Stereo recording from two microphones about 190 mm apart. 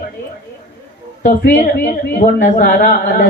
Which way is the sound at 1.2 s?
50° left (ahead or behind).